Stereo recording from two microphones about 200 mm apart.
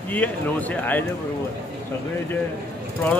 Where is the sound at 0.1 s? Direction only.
10° left (ahead or behind).